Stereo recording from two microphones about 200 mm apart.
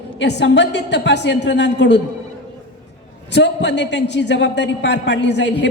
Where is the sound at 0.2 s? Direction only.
60° left (ahead or behind).